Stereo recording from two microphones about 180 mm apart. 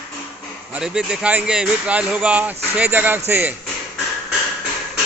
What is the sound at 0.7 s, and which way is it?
A man's voice, 5° right (ahead or behind).